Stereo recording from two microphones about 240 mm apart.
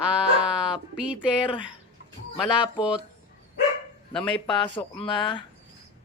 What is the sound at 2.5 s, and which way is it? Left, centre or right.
Speech, centre.